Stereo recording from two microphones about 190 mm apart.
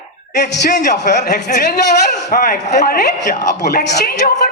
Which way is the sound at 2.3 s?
45° left (ahead or behind).